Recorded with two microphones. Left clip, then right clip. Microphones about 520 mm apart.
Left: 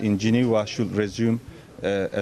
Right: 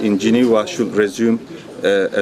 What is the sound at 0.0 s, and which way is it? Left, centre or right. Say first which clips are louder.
Speech: right 8 dB; left.